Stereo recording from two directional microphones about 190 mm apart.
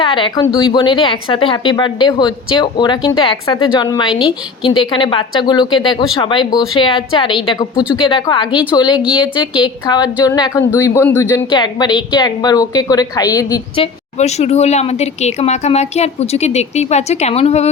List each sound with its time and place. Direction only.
0.0 s a woman's voice: 25° left (ahead or behind)
4.1 s a woman's voice: 5° right (ahead or behind)
4.9 s a woman's voice: 25° left (ahead or behind)
14.2 s speech: 35° left (ahead or behind)